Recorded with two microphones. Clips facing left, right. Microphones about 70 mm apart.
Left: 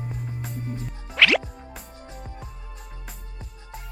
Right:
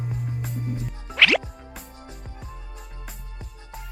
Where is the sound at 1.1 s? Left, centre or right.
Centre.